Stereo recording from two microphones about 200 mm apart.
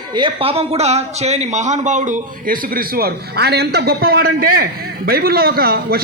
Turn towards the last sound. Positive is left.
turn(degrees=-50)  # may be behind; listen again after turning